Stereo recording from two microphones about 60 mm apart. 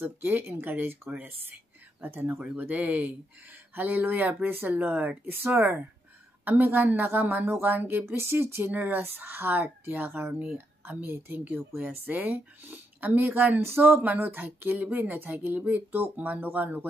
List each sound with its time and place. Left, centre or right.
0.0 s speech: right
8.2 s speech: right
13.6 s speech: right